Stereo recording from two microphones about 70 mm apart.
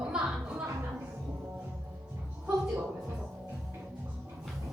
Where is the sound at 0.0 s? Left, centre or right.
Centre.